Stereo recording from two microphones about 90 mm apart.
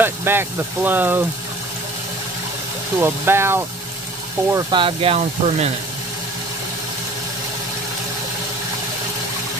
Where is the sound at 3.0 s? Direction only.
30° right (ahead or behind).